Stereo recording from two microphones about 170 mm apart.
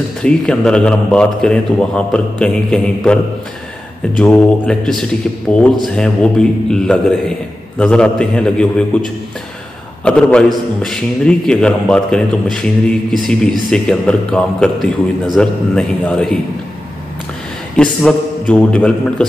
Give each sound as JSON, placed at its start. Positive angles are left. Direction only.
{"t": 0.2, "sound": "a man's voice", "side_deg": 5}
{"t": 4.2, "sound": "a man's voice", "side_deg": 5}
{"t": 10.0, "sound": "a man's voice", "side_deg": 5}
{"t": 17.8, "sound": "a man's voice", "side_deg": 5}